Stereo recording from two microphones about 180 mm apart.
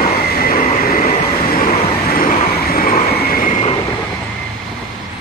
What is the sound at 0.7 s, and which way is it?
Vehicle, 50° left (ahead or behind).